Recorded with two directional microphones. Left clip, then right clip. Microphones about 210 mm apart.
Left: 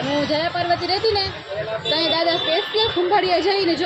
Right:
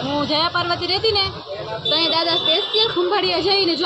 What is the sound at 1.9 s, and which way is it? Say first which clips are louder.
A woman's voice: right 1 dB; centre (ahead or behind).